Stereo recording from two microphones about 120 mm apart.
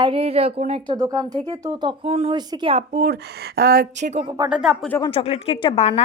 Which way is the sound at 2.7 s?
90° right.